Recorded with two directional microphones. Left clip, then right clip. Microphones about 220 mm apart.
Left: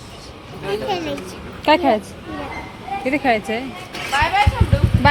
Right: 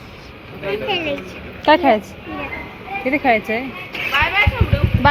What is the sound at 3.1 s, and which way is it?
Speech, 5° left (ahead or behind).